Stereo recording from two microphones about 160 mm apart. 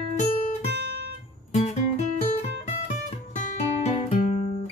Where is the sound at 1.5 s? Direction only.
45° left (ahead or behind).